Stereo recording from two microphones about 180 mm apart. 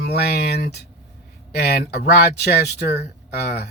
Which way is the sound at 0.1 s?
60° left (ahead or behind).